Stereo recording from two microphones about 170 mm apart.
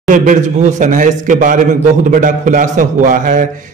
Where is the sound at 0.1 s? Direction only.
50° right (ahead or behind).